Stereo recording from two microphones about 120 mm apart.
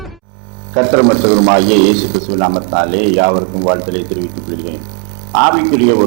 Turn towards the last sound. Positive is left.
turn(degrees=-20)  # may be behind; listen again after turning